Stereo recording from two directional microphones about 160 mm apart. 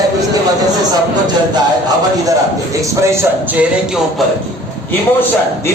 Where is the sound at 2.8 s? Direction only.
20° right (ahead or behind).